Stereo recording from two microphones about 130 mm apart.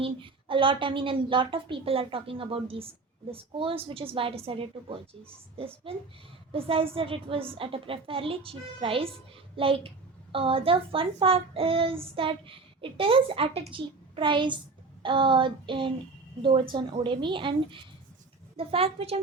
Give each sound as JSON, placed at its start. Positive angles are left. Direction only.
{"t": 0.0, "sound": "a child's voice", "side_deg": -40}
{"t": 15.0, "sound": "child singing", "side_deg": -40}
{"t": 17.0, "sound": "child singing", "side_deg": -35}
{"t": 18.5, "sound": "a child's voice", "side_deg": -50}